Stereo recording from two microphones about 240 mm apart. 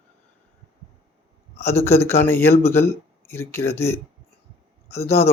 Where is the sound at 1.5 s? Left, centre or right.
Centre.